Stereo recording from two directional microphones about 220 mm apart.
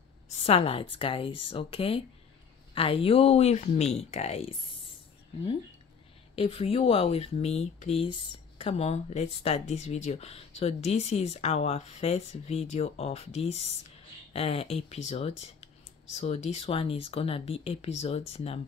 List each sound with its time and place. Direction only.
0.4 s speech: 25° left (ahead or behind)
6.3 s speech: 25° left (ahead or behind)